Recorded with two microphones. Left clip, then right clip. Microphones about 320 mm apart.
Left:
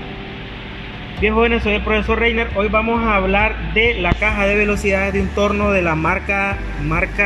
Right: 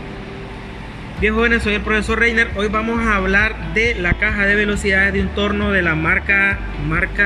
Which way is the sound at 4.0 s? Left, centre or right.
Left.